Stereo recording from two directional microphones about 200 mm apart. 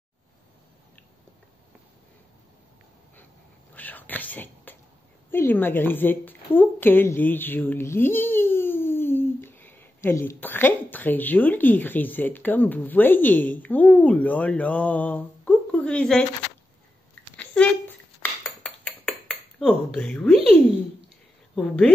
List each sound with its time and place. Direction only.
3.7 s whispering: 10° left (ahead or behind)
5.3 s a woman's voice: 10° left (ahead or behind)
17.4 s a sound: 5° left (ahead or behind)
18.4 s cutlery: 5° left (ahead or behind)
21.5 s speech: 5° left (ahead or behind)